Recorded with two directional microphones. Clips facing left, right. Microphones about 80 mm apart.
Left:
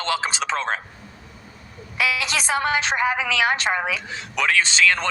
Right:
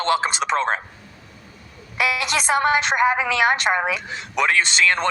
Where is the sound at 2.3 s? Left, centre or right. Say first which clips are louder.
Right 3 dB; right.